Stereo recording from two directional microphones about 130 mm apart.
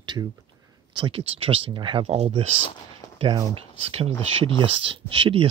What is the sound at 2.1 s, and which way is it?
Speech, 50° right (ahead or behind).